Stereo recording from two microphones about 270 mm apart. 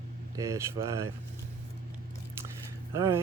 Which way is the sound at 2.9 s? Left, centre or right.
Centre.